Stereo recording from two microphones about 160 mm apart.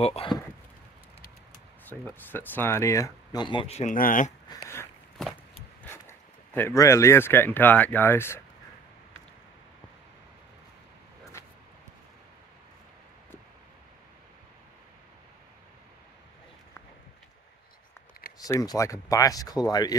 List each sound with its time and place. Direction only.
0.0 s speech: 40° left (ahead or behind)
1.9 s speech: 10° left (ahead or behind); by 3.9 s 40° left (ahead or behind)
3.9 s speech: 60° left (ahead or behind)
4.5 s a sound: 15° left (ahead or behind)
5.9 s speech: 15° left (ahead or behind)
18.4 s speech: 20° left (ahead or behind)